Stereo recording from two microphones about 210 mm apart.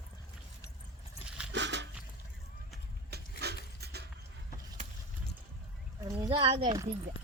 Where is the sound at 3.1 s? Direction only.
50° right (ahead or behind).